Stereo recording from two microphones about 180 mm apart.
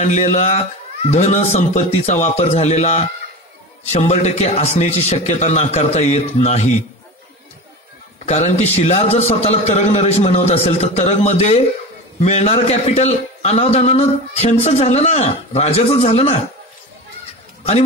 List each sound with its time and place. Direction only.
0.0 s a man's voice: 40° left (ahead or behind)
8.3 s a man's voice: 35° left (ahead or behind)